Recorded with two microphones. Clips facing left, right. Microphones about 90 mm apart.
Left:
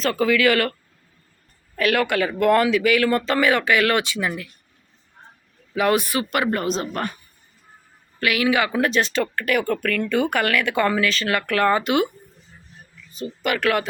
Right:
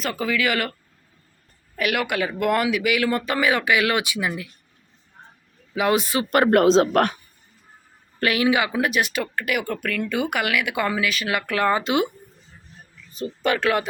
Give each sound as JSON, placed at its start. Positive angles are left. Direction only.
{"t": 0.0, "sound": "speech", "side_deg": -10}
{"t": 5.7, "sound": "speech", "side_deg": -20}
{"t": 6.5, "sound": "a man's voice", "side_deg": -85}
{"t": 8.2, "sound": "speech", "side_deg": -25}
{"t": 13.1, "sound": "speech", "side_deg": -35}